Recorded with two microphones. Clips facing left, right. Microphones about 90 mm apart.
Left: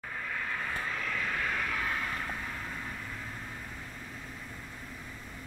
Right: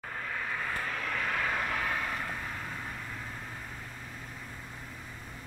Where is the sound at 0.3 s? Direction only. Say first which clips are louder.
Right 1 dB; 5° right (ahead or behind).